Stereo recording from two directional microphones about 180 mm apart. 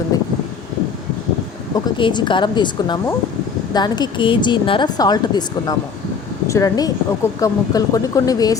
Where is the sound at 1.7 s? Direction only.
25° left (ahead or behind).